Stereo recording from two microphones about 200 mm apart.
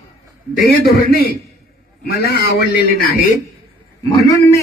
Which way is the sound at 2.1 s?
50° left (ahead or behind).